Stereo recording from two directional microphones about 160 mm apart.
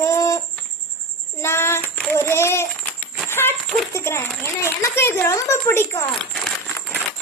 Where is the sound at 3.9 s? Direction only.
15° left (ahead or behind).